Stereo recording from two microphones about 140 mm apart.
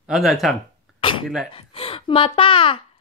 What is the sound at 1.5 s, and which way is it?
Speech, 40° left (ahead or behind).